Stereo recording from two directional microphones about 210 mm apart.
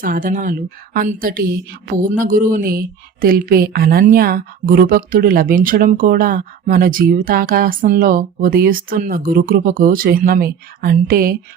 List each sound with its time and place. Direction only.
0.0 s a woman's voice: 40° right (ahead or behind)